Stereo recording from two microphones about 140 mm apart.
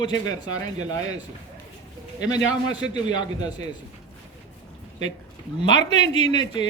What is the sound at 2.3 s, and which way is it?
A man's voice, 30° left (ahead or behind).